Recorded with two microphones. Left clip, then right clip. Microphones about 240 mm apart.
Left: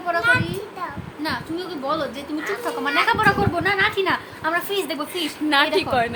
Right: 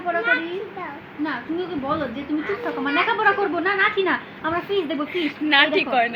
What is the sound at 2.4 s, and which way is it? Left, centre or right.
Speech, left.